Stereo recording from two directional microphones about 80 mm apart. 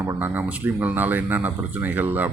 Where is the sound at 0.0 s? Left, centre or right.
Right.